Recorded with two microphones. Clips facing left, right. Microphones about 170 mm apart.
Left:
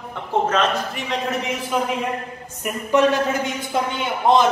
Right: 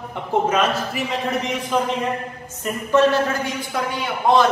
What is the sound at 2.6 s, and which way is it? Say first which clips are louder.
A man's voice: right 1 dB; 15° left (ahead or behind).